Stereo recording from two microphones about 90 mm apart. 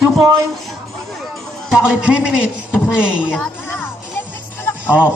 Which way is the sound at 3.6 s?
25° left (ahead or behind).